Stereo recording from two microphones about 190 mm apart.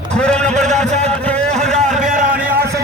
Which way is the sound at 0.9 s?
35° right (ahead or behind).